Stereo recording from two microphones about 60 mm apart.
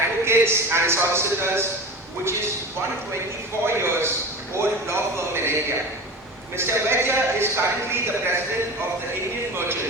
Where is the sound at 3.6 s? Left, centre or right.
Right.